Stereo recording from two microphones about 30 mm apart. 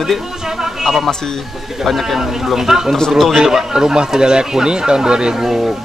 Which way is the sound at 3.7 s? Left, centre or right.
Right.